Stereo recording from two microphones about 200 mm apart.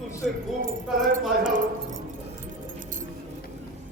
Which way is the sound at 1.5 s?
40° right (ahead or behind).